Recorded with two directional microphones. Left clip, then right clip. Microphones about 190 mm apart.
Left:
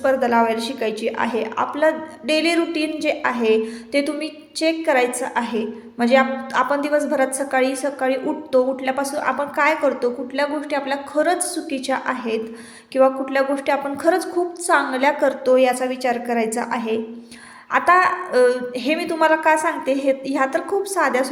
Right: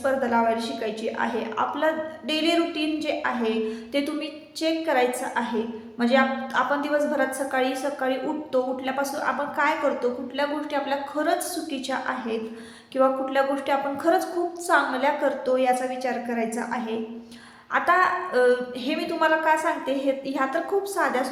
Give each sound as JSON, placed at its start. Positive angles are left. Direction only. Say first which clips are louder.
{"t": 0.0, "sound": "a woman's voice", "louder": "left 5 dB", "side_deg": 35}